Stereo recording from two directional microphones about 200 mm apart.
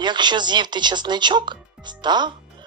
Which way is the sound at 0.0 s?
20° right (ahead or behind).